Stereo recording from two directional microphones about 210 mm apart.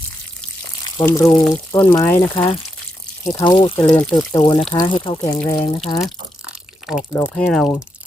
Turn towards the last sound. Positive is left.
turn(degrees=5)  # may be behind; listen again after turning